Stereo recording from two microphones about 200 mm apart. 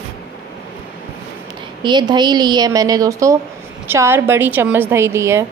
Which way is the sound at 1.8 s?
20° right (ahead or behind).